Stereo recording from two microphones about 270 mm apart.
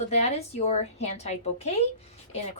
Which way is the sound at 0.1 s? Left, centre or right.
Left.